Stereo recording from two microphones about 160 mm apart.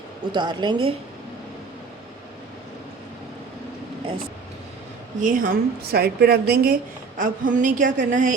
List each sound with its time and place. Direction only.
0.3 s a woman's voice: 30° right (ahead or behind)
5.2 s a woman's voice: 60° right (ahead or behind)
7.2 s speech: 55° right (ahead or behind)